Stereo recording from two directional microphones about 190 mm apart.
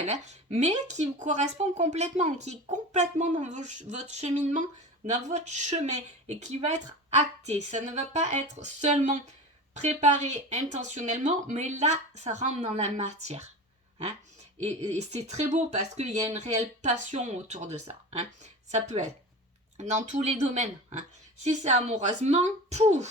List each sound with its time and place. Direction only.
0.0 s speech: 35° right (ahead or behind)
14.6 s speech: 35° right (ahead or behind)